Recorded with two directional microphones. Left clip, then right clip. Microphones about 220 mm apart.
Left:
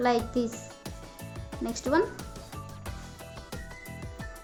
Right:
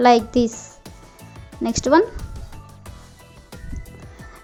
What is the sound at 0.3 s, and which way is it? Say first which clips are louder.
Speech: right 10 dB; 35° right (ahead or behind).